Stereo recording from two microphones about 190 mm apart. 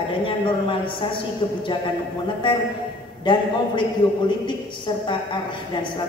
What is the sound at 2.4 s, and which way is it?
A man's voice, 25° left (ahead or behind).